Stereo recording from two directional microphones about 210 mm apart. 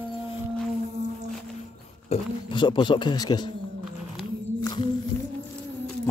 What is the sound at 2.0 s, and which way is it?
Speech, 25° left (ahead or behind).